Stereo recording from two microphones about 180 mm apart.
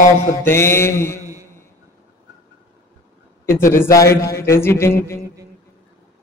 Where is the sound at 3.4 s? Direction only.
15° left (ahead or behind).